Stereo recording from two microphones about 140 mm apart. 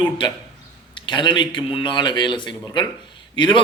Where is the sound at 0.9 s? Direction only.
35° left (ahead or behind).